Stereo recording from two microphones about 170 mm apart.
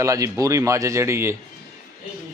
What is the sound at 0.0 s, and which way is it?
Speech, 20° right (ahead or behind).